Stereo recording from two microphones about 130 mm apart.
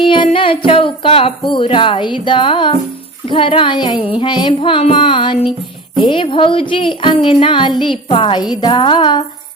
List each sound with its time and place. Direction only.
0.0 s music: 40° left (ahead or behind)